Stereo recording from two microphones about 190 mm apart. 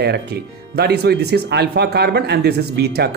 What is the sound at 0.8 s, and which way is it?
Speech, 60° right (ahead or behind).